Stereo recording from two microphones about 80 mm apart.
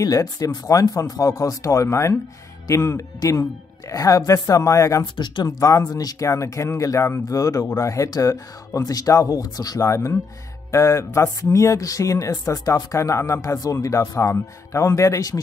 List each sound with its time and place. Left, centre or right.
0.0 s speech: left
5.0 s speech: left